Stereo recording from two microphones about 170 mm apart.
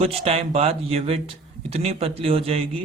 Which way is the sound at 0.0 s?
35° right (ahead or behind).